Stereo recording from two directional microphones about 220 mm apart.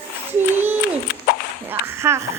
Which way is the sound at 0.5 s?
10° right (ahead or behind).